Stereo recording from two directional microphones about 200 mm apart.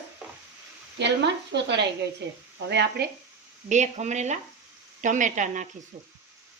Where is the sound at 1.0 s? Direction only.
60° right (ahead or behind).